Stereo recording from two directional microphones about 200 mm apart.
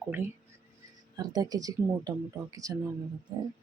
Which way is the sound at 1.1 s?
20° right (ahead or behind).